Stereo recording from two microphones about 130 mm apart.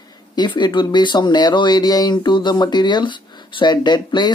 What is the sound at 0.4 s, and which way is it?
Speech, 35° left (ahead or behind).